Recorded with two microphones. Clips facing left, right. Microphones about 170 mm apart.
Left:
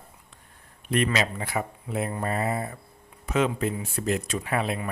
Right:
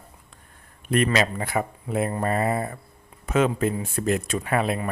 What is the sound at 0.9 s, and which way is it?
Speech, 50° right (ahead or behind).